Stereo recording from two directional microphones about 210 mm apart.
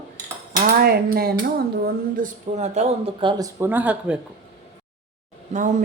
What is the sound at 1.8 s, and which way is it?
Speech, 35° right (ahead or behind).